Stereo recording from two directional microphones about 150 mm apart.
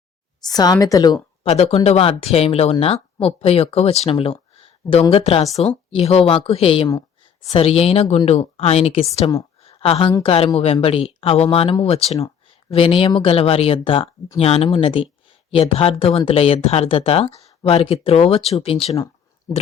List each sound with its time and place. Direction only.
0.4 s a woman's voice: 25° left (ahead or behind)
1.5 s speech: 45° left (ahead or behind)
4.1 s a sound: 40° left (ahead or behind)
5.1 s speech: 40° left (ahead or behind)
9.6 s a sound: 40° left (ahead or behind)
10.2 s speech: 40° left (ahead or behind)